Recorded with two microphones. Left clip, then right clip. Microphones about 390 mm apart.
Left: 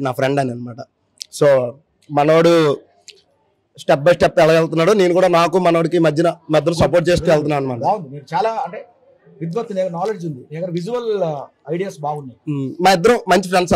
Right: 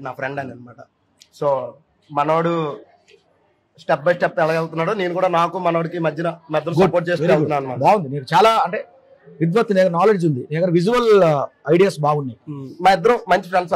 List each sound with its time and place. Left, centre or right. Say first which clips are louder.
0.0 s a man's voice: left 8 dB; left
2.1 s a man's voice: left 6 dB; left
3.7 s a man's voice: left 4 dB; left
7.8 s a man's voice: right 4 dB; right
12.4 s speech: left 2 dB; left